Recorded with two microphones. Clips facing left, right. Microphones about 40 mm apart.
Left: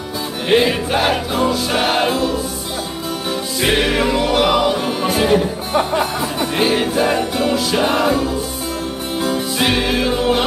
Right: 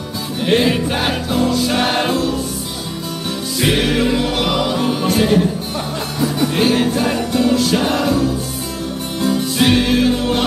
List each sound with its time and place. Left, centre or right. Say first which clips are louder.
0.5 s music: left 1 dB; centre
3.6 s music: even; centre
5.8 s music: left 7 dB; left
6.5 s music: left 1 dB; centre
9.6 s music: right 4 dB; centre